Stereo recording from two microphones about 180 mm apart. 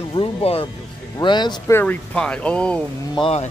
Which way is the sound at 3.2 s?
35° left (ahead or behind).